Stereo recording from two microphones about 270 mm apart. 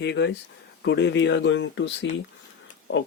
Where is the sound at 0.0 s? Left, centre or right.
Left.